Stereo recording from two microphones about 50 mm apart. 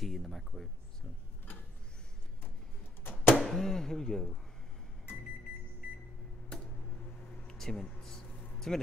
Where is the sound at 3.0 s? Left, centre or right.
Left.